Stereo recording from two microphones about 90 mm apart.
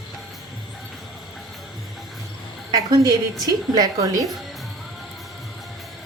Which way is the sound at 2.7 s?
45° right (ahead or behind).